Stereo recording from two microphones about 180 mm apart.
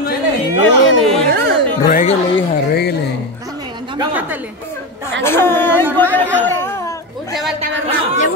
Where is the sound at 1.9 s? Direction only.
40° left (ahead or behind).